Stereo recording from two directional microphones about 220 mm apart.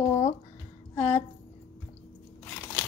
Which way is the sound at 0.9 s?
5° left (ahead or behind).